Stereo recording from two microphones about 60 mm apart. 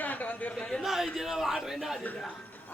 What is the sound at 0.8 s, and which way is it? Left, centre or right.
Speech, centre.